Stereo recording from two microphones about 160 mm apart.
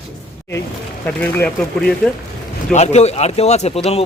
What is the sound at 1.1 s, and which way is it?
Speech, 5° left (ahead or behind).